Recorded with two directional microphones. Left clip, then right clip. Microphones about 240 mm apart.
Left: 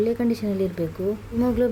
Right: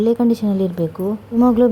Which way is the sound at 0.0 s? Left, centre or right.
Centre.